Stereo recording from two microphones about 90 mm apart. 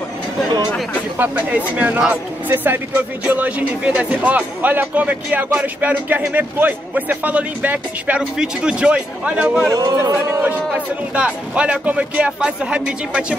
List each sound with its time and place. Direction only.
1.1 s speech: 20° right (ahead or behind)
9.7 s speech: 45° right (ahead or behind)
11.1 s speech: 15° right (ahead or behind)